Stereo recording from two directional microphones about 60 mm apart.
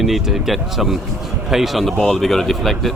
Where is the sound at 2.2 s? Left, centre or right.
Centre.